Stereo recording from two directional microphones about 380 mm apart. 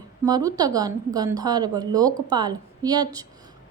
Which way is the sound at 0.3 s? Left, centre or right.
Centre.